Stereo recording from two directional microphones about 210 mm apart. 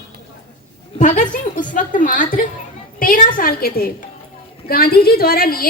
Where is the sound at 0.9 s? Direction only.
40° left (ahead or behind).